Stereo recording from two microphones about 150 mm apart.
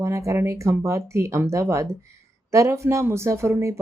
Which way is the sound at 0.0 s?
20° right (ahead or behind).